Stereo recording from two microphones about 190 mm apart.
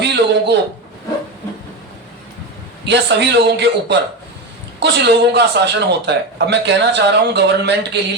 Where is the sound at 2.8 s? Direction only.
65° right (ahead or behind).